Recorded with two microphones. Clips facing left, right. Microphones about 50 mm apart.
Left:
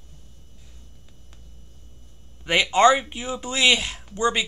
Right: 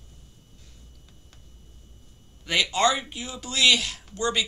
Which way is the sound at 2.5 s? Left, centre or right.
Left.